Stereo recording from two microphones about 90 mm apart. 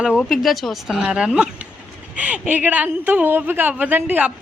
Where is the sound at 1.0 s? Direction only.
10° right (ahead or behind).